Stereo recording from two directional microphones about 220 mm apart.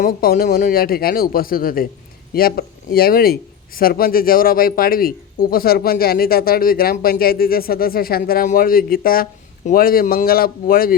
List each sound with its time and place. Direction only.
0.0 s speech: 40° left (ahead or behind)